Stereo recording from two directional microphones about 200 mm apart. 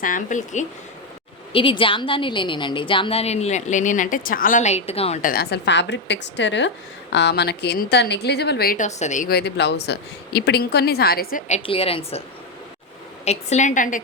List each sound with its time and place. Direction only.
0.0 s a woman's voice: 40° left (ahead or behind)
1.5 s a woman's voice: 25° left (ahead or behind)
13.2 s a woman's voice: 35° left (ahead or behind)